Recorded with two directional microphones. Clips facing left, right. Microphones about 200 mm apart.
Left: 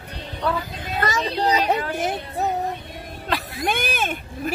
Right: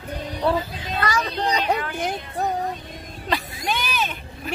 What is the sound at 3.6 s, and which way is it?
Vehicle, 50° left (ahead or behind).